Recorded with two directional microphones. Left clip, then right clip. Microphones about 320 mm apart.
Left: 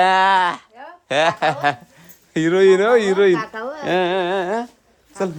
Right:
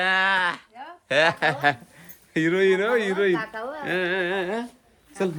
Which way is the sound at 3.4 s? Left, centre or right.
Left.